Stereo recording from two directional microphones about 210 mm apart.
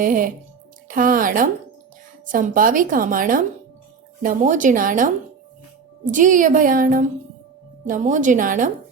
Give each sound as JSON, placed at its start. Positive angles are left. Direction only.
{"t": 0.0, "sound": "a woman's voice", "side_deg": -40}